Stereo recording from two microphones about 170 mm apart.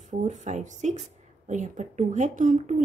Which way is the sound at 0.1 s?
45° right (ahead or behind).